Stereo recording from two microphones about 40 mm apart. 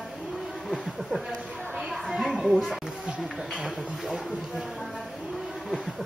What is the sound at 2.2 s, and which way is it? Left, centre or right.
Speech, centre.